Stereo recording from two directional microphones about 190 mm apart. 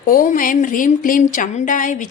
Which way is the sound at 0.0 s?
45° left (ahead or behind).